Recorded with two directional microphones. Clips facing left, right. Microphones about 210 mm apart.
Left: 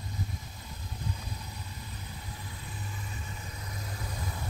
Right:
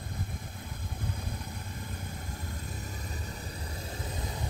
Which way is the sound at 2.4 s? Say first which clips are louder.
Right 3 dB; 45° right (ahead or behind).